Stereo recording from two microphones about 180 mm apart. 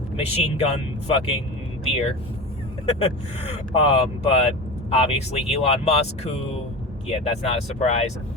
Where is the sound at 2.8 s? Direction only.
35° left (ahead or behind).